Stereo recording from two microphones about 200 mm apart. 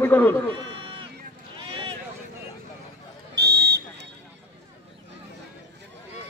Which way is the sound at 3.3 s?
55° right (ahead or behind).